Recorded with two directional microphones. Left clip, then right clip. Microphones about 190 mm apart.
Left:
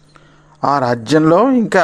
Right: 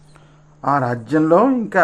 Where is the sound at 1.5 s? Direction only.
30° left (ahead or behind).